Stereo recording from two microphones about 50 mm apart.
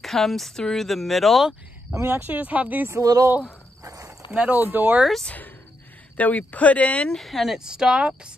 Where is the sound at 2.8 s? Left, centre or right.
Right.